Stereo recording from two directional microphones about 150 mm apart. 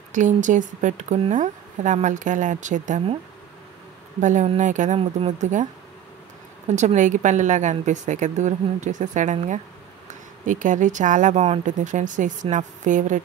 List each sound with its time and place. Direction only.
0.1 s speech: 55° right (ahead or behind)
4.2 s speech: 55° right (ahead or behind)
6.7 s speech: 50° right (ahead or behind)